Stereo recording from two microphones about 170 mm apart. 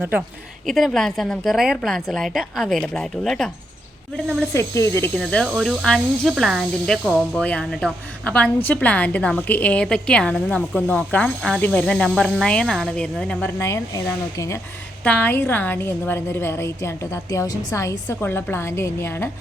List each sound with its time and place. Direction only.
0.7 s speech: centre (ahead or behind)
4.5 s a woman's voice: 15° left (ahead or behind)
5.1 s a woman's voice: 5° left (ahead or behind)